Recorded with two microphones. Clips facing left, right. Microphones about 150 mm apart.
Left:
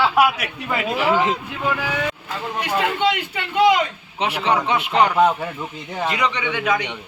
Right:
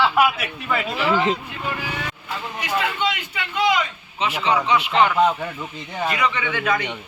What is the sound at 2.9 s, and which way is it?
Speech, 60° left (ahead or behind).